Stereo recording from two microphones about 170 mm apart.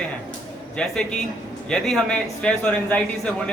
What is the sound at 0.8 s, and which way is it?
A man's voice, 5° left (ahead or behind).